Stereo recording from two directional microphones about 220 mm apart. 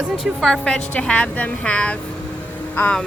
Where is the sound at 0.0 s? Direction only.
Centre (ahead or behind).